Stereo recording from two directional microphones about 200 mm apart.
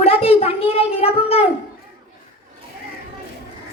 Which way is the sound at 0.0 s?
30° left (ahead or behind).